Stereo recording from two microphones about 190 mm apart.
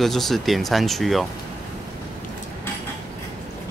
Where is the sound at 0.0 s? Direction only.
Centre (ahead or behind).